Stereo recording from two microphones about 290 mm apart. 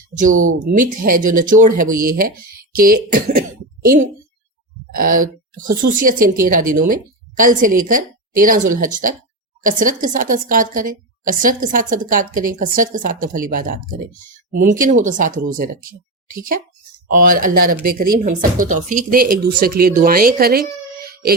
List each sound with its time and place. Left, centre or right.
1.0 s a woman's voice: right